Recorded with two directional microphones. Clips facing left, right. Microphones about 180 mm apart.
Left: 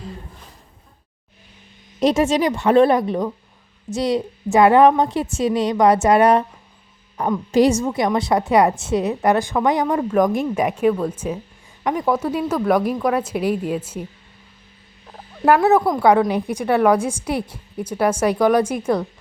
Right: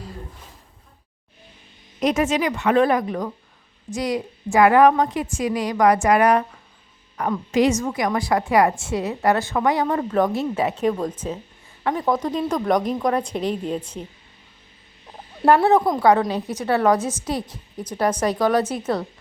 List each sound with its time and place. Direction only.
2.0 s a woman's voice: 30° left (ahead or behind); by 14.1 s 5° left (ahead or behind)
15.4 s a woman's voice: 5° left (ahead or behind)